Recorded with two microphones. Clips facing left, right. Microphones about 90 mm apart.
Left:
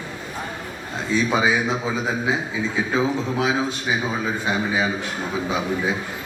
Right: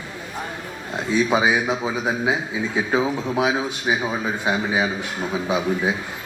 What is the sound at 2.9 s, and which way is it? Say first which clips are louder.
A man's voice: right 1 dB; 15° right (ahead or behind).